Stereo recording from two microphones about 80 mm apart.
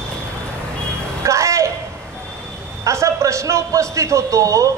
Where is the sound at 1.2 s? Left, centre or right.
Right.